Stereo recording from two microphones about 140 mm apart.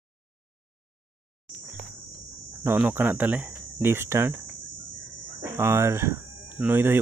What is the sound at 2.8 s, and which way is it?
A man's voice, 10° right (ahead or behind).